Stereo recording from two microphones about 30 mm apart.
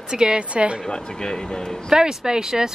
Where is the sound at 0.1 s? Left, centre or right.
Right.